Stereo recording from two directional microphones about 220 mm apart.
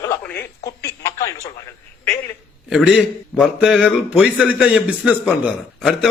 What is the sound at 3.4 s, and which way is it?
A man's voice, centre (ahead or behind).